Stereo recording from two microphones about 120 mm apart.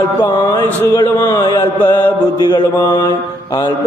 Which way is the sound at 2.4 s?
30° left (ahead or behind).